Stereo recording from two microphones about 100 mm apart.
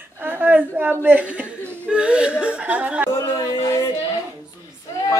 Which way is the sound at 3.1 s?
35° left (ahead or behind).